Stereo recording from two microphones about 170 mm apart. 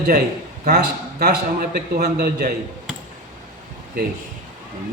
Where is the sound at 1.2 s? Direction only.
55° right (ahead or behind).